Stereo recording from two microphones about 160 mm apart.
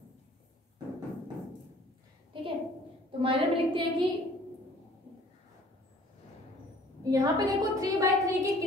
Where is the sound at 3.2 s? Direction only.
35° right (ahead or behind).